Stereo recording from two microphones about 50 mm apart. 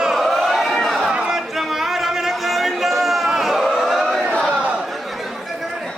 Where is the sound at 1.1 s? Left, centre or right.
Centre.